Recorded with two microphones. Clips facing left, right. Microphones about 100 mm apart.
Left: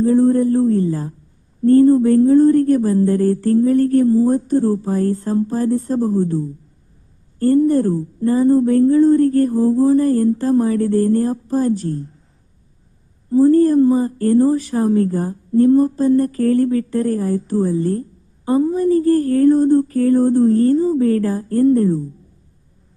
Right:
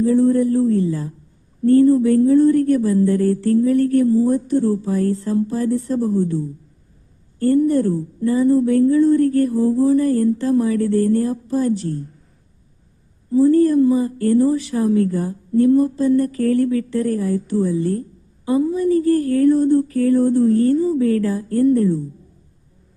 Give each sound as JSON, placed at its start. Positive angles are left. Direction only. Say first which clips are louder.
{"t": 0.0, "sound": "a sound", "louder": "left 1 dB", "side_deg": 40}
{"t": 1.6, "sound": "speech", "louder": "left 2 dB", "side_deg": 35}
{"t": 13.3, "sound": "speech", "louder": "left 2 dB", "side_deg": 40}